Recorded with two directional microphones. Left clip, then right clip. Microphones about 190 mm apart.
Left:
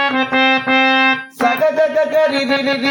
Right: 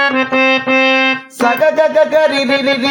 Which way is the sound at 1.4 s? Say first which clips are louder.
Right 3 dB; 40° right (ahead or behind).